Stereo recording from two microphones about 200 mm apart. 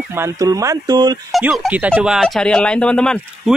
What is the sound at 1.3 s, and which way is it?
Speech, centre (ahead or behind).